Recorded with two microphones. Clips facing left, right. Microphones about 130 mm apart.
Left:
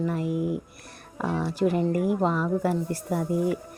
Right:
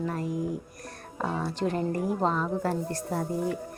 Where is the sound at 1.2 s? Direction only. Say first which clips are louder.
Left 4 dB; 5° left (ahead or behind).